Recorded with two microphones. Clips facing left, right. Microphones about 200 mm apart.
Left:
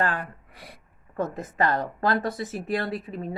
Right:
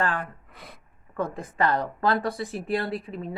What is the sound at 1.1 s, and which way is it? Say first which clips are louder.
Speech: left 1 dB; 45° left (ahead or behind).